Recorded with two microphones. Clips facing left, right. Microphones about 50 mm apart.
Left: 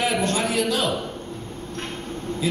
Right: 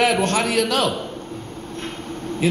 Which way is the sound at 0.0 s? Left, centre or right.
Right.